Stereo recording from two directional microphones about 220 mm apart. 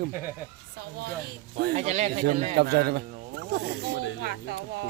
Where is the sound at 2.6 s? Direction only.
45° right (ahead or behind).